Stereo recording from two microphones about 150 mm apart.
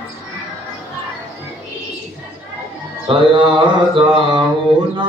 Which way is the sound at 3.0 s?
35° right (ahead or behind).